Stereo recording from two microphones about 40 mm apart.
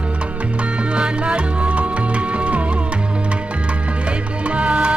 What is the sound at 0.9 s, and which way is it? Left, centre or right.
Music, right.